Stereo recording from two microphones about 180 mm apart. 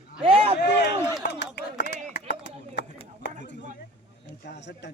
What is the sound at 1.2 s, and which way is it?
Speech, 75° left (ahead or behind).